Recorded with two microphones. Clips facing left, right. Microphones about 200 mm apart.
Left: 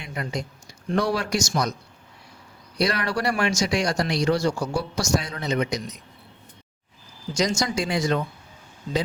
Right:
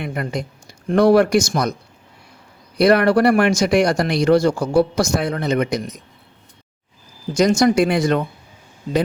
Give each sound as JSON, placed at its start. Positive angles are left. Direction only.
{"t": 0.0, "sound": "speech", "side_deg": -55}
{"t": 2.7, "sound": "speech", "side_deg": -55}
{"t": 7.3, "sound": "speech", "side_deg": -55}